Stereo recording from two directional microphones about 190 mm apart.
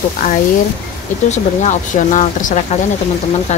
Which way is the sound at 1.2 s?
40° left (ahead or behind).